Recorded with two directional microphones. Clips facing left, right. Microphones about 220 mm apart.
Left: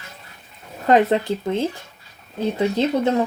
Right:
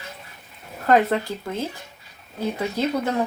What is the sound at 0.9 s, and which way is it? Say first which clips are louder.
Speech: left 3 dB; 20° left (ahead or behind).